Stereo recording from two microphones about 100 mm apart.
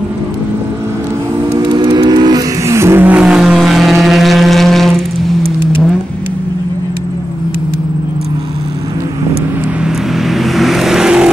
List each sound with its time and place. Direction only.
1.7 s vehicle: 45° right (ahead or behind)
2.6 s vehicle: 25° right (ahead or behind)
3.2 s vehicle: 5° right (ahead or behind)
10.1 s vehicle: centre (ahead or behind)